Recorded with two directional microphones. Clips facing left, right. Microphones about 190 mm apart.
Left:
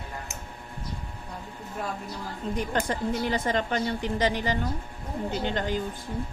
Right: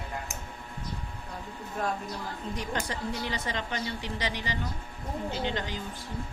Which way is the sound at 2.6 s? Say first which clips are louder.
Left 6 dB; 55° left (ahead or behind).